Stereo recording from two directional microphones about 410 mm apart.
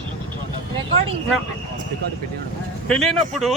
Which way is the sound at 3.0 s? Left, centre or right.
Centre.